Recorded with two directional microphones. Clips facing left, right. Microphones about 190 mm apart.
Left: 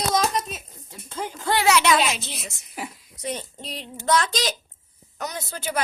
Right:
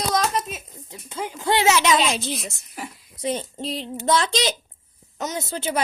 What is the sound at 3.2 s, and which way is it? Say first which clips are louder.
A woman's voice: right 5 dB; 30° right (ahead or behind).